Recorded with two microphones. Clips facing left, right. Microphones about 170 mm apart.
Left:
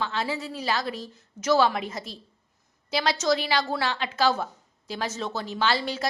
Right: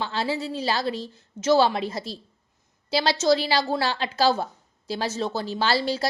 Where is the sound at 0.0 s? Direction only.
30° right (ahead or behind).